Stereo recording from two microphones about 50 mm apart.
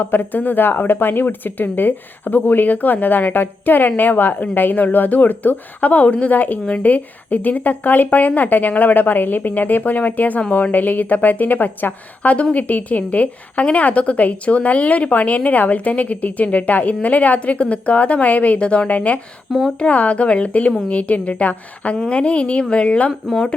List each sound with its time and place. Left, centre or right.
0.0 s a woman's voice: left